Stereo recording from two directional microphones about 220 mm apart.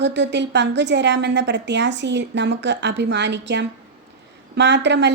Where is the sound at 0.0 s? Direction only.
55° right (ahead or behind).